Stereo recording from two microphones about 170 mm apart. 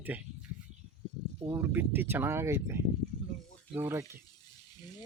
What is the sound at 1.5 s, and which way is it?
Speech, 10° right (ahead or behind).